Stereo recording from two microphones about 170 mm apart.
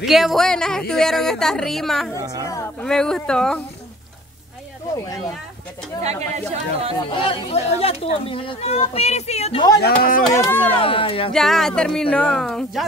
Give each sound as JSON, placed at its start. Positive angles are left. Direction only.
{"t": 0.0, "sound": "speech", "side_deg": 0}
{"t": 2.1, "sound": "speech", "side_deg": -20}
{"t": 2.4, "sound": "speech", "side_deg": 20}
{"t": 2.8, "sound": "speech", "side_deg": 5}
{"t": 6.5, "sound": "speech", "side_deg": -35}
{"t": 7.1, "sound": "speech", "side_deg": 30}
{"t": 9.8, "sound": "speech", "side_deg": 60}
{"t": 10.4, "sound": "speech", "side_deg": 10}
{"t": 10.7, "sound": "speech", "side_deg": 30}
{"t": 11.3, "sound": "speech", "side_deg": 0}